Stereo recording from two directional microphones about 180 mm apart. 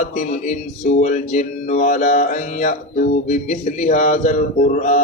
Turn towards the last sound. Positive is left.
turn(degrees=45)  # may be behind; listen again after turning